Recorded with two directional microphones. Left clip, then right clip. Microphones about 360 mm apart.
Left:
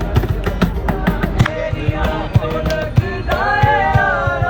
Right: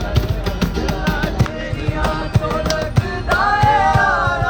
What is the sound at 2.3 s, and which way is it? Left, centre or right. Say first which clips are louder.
Music: even; right.